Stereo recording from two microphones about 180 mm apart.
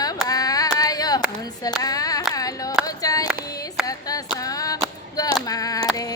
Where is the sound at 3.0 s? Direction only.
20° left (ahead or behind).